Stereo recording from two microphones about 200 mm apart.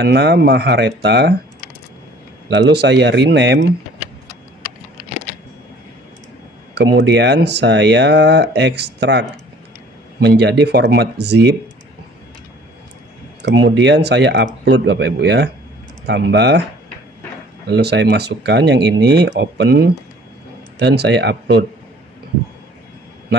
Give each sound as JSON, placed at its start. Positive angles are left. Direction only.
{"t": 0.0, "sound": "speech", "side_deg": -55}
{"t": 2.5, "sound": "speech", "side_deg": -55}
{"t": 6.7, "sound": "speech", "side_deg": -60}
{"t": 10.2, "sound": "speech", "side_deg": -55}
{"t": 13.4, "sound": "speech", "side_deg": -55}
{"t": 17.6, "sound": "speech", "side_deg": -55}